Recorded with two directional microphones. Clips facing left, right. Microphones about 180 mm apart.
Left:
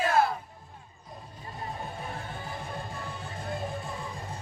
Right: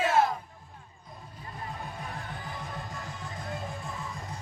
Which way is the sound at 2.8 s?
30° left (ahead or behind).